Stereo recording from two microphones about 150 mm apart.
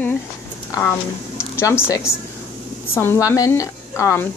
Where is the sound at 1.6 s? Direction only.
20° left (ahead or behind).